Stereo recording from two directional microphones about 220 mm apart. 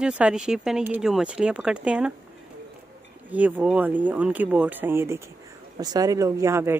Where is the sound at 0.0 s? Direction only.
5° right (ahead or behind).